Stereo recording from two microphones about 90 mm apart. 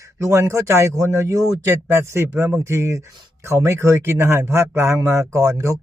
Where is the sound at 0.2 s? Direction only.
30° right (ahead or behind).